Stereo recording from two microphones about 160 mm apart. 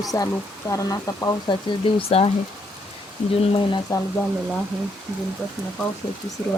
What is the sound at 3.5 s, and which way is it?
Speech, 30° left (ahead or behind).